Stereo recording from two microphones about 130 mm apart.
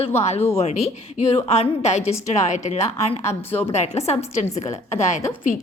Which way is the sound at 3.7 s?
60° left (ahead or behind).